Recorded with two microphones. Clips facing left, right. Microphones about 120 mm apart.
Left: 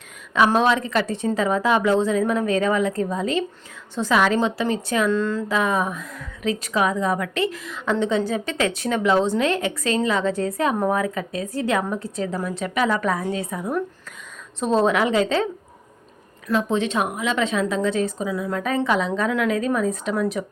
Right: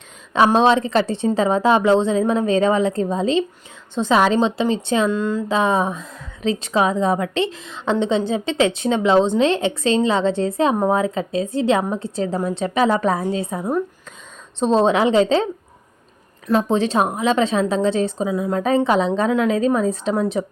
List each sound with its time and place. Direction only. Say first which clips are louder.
0.3 s a woman's voice: right 3 dB; 30° right (ahead or behind)
5.1 s speech: right 1 dB; 15° right (ahead or behind)
5.5 s a woman's voice: right 3 dB; 25° right (ahead or behind)
16.5 s a woman's voice: right 4 dB; 35° right (ahead or behind)